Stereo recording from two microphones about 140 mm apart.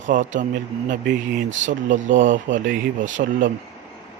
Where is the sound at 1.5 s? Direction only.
60° right (ahead or behind); by 3.5 s 80° right.